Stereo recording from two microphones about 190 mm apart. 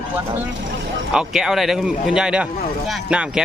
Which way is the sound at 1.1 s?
Centre (ahead or behind).